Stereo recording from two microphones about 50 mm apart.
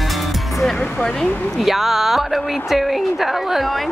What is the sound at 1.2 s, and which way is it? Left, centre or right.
Speech, left.